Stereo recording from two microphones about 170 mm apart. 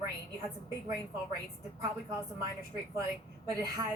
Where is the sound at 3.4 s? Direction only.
20° right (ahead or behind).